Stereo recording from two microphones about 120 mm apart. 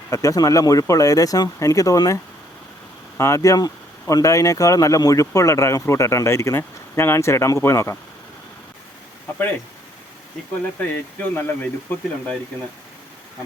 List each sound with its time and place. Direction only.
0.1 s speech: 30° left (ahead or behind)
10.8 s speech: 15° left (ahead or behind)